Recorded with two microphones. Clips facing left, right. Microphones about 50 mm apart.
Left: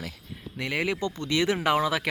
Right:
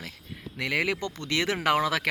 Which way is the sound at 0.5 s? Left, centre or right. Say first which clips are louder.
Right 1 dB; right.